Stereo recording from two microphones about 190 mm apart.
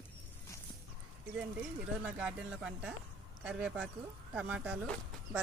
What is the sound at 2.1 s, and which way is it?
Speech, 5° right (ahead or behind).